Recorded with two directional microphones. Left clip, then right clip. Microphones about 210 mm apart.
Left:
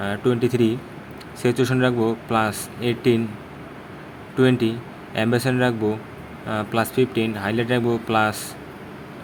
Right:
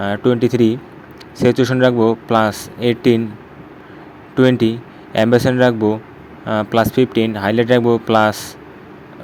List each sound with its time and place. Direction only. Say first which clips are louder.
0.0 s speech: right 6 dB; 25° right (ahead or behind)
4.4 s speech: right 6 dB; 25° right (ahead or behind)